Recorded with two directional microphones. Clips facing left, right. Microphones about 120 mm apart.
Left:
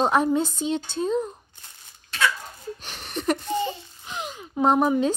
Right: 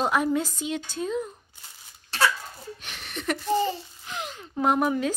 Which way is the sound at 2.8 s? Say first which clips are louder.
Left 5 dB; 35° left (ahead or behind).